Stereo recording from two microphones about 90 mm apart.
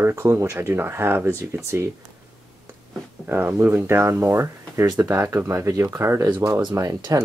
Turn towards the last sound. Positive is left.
turn(degrees=-45)  # may be behind; listen again after turning